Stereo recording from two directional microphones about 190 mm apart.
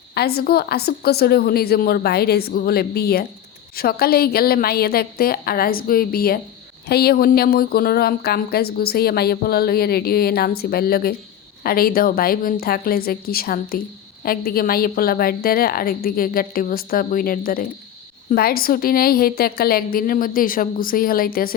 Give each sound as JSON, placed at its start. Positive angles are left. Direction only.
{"t": 0.1, "sound": "a woman's voice", "side_deg": 55}